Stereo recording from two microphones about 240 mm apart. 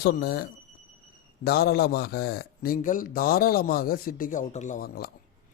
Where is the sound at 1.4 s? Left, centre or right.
Left.